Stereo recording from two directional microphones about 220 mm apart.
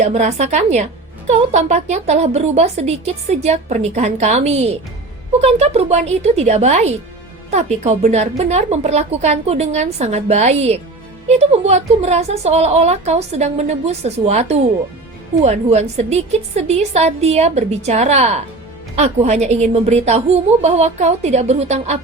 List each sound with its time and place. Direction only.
0.0 s a woman's voice: 30° right (ahead or behind)